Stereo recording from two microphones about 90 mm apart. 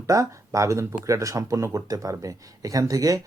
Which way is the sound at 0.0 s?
35° right (ahead or behind).